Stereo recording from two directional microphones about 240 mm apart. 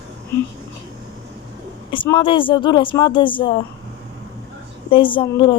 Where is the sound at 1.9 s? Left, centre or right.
Left.